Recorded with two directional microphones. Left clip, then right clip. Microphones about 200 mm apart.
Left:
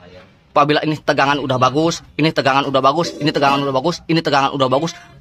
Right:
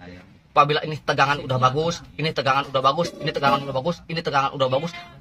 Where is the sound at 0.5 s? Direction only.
55° left (ahead or behind).